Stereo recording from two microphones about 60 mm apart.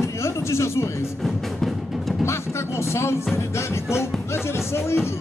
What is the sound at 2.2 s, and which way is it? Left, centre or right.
A man's voice, left.